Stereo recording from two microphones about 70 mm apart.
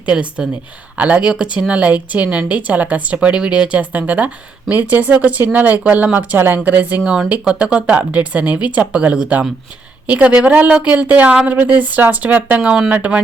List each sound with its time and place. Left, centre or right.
0.0 s speech: centre
12.5 s speech: centre